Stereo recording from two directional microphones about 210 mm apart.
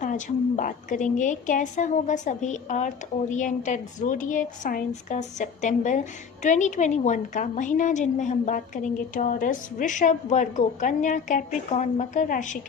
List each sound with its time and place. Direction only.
0.0 s a woman's voice: 35° left (ahead or behind)